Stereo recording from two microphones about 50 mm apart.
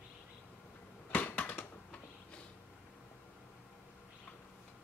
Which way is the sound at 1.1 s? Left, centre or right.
Left.